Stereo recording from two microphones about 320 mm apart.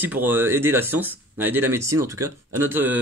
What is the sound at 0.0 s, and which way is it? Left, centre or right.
Speech, centre.